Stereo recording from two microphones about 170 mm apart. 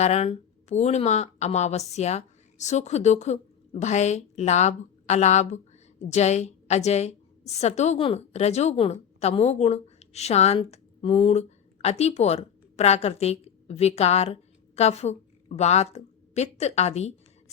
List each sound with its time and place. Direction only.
0.0 s a woman's voice: 40° left (ahead or behind)